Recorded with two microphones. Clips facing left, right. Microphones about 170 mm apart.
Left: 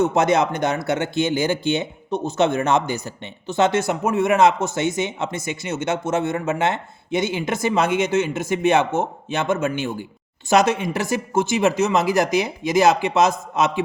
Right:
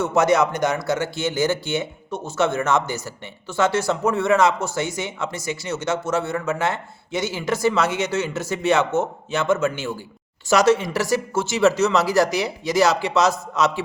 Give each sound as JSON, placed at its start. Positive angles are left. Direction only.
{"t": 0.0, "sound": "speech", "side_deg": 20}